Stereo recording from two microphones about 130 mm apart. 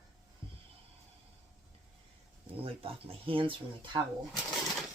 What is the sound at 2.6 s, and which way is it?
Speech, 45° right (ahead or behind).